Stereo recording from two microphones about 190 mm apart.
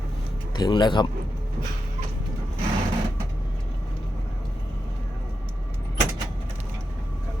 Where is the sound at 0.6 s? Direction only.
20° left (ahead or behind).